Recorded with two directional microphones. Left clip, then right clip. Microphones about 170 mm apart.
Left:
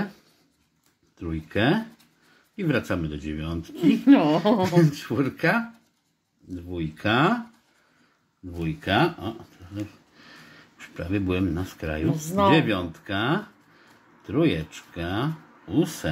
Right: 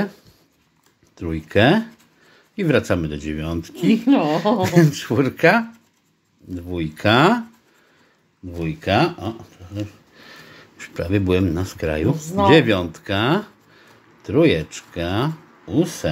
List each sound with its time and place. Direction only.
1.1 s speech: 25° right (ahead or behind)
4.0 s a woman's voice: 25° left (ahead or behind)
4.6 s speech: 25° right (ahead or behind)
6.7 s speech: 30° right (ahead or behind)
8.5 s speech: 20° right (ahead or behind)
10.1 s a sound: 25° right (ahead or behind)
12.2 s a woman's voice: 25° left (ahead or behind)
12.4 s speech: 25° right (ahead or behind)